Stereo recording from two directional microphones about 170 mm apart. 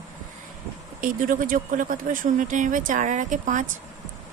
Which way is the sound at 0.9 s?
55° right (ahead or behind).